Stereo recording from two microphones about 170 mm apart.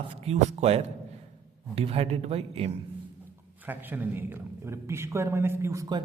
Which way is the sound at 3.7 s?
10° right (ahead or behind).